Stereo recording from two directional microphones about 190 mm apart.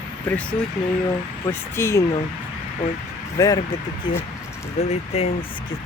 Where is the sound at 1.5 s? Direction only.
15° left (ahead or behind).